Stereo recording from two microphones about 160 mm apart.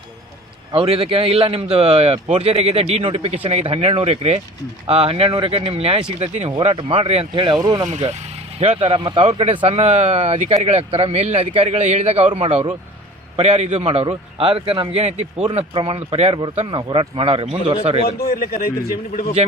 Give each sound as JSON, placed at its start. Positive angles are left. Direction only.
{"t": 0.7, "sound": "speech", "side_deg": -35}
{"t": 8.5, "sound": "speech", "side_deg": -40}
{"t": 18.2, "sound": "speech", "side_deg": 75}